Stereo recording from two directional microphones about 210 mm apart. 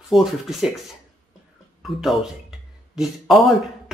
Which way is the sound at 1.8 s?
Centre (ahead or behind).